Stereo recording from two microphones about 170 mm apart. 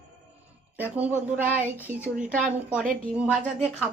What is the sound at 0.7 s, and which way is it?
A woman's voice, 10° right (ahead or behind).